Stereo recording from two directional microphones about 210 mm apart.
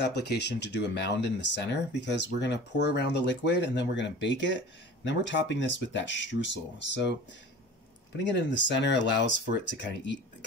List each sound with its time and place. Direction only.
0.0 s speech: 55° left (ahead or behind)
8.2 s speech: 55° left (ahead or behind)